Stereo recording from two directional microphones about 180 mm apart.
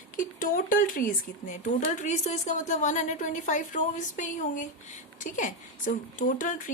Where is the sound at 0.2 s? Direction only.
50° left (ahead or behind).